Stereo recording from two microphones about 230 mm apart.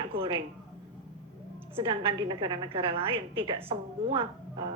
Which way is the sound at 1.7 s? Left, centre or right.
Right.